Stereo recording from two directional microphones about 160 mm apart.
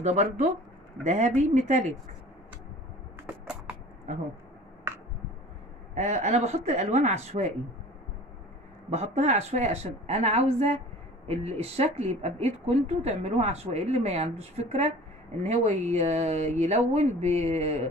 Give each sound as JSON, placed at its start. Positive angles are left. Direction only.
{"t": 0.0, "sound": "speech", "side_deg": -45}
{"t": 5.9, "sound": "speech", "side_deg": -45}
{"t": 8.9, "sound": "speech", "side_deg": -45}